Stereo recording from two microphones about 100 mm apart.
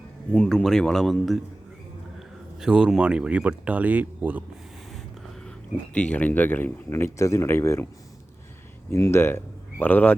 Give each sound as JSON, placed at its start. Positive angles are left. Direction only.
{"t": 0.3, "sound": "speech", "side_deg": 5}
{"t": 2.1, "sound": "a sound", "side_deg": -5}
{"t": 3.0, "sound": "speech", "side_deg": -10}
{"t": 5.5, "sound": "speech", "side_deg": 10}
{"t": 8.9, "sound": "speech", "side_deg": 25}